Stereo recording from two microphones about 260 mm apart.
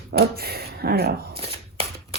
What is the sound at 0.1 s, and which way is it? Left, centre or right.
Speech, right.